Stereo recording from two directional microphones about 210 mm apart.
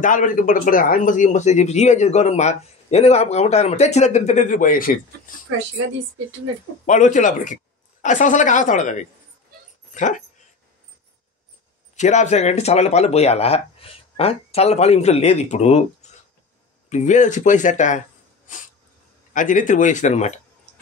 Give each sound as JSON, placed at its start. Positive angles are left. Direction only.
{"t": 0.0, "sound": "speech", "side_deg": 40}
{"t": 6.9, "sound": "speech", "side_deg": 35}
{"t": 9.9, "sound": "speech", "side_deg": 35}
{"t": 11.9, "sound": "speech", "side_deg": 35}
{"t": 19.3, "sound": "speech", "side_deg": 40}